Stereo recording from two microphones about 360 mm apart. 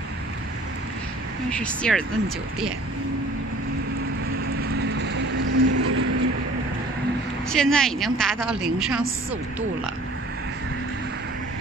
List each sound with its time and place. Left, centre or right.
1.5 s a woman's voice: centre
4.6 s train: right
7.4 s a woman's voice: centre